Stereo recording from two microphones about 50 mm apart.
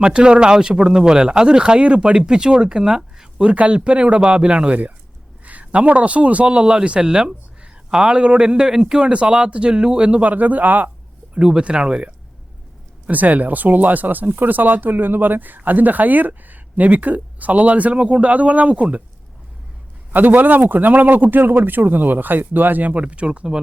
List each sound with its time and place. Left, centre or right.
0.0 s speech: centre
3.5 s a man's voice: right
11.3 s a man's voice: centre
13.1 s speech: right
20.1 s speech: right